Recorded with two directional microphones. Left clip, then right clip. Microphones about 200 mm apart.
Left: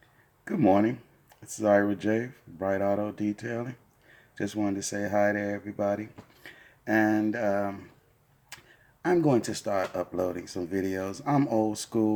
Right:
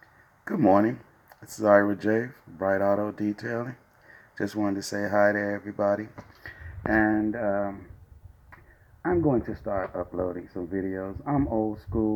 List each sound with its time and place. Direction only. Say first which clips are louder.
0.4 s speech: right 2 dB; 5° left (ahead or behind)
7.0 s speech: left 2 dB; 25° left (ahead or behind)
9.0 s speech: even; 25° left (ahead or behind)